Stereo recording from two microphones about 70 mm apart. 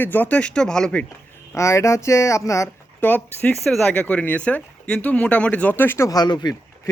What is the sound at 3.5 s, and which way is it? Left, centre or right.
Speech, centre.